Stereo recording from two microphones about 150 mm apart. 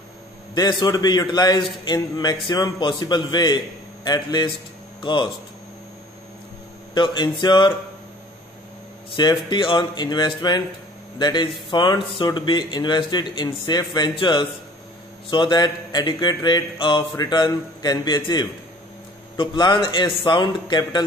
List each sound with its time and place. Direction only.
0.6 s a man's voice: 30° left (ahead or behind)
6.9 s a man's voice: 30° left (ahead or behind)
9.1 s a man's voice: 30° left (ahead or behind)